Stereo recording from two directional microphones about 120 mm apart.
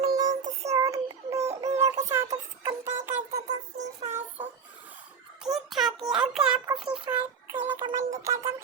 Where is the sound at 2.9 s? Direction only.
15° right (ahead or behind).